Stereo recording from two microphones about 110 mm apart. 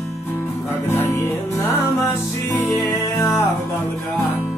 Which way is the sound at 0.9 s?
20° left (ahead or behind).